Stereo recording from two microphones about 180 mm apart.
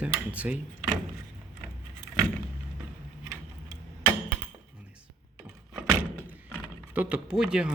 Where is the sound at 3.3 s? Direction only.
20° right (ahead or behind).